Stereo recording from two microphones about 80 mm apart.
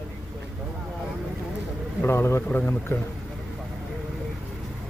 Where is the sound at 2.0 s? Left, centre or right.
Left.